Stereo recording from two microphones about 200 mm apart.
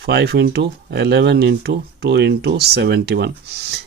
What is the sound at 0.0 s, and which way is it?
Speech, 55° right (ahead or behind).